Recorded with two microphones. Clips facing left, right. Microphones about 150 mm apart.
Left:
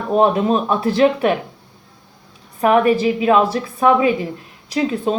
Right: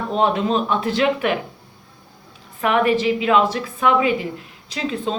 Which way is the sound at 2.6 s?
35° left (ahead or behind).